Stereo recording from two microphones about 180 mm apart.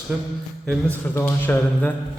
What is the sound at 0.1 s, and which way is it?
Speech, 5° right (ahead or behind).